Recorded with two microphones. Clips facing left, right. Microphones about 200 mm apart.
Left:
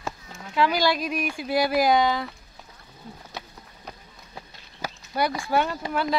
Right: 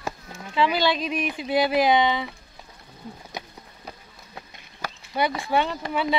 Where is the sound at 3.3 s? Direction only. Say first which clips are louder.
Right 2 dB; 15° right (ahead or behind).